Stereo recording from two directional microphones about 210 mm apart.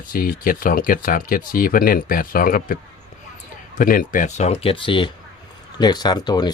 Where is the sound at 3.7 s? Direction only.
40° left (ahead or behind).